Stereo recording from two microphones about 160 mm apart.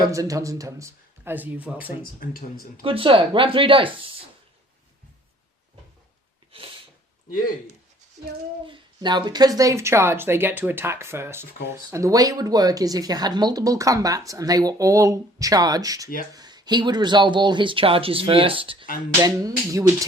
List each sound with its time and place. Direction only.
0.1 s a woman's voice: 20° right (ahead or behind)
2.2 s speech: 65° left (ahead or behind)
2.8 s speech: 35° right (ahead or behind)
6.5 s sneeze: 35° right (ahead or behind)
8.6 s a woman's voice: 30° right (ahead or behind)
19.2 s speech: 20° right (ahead or behind)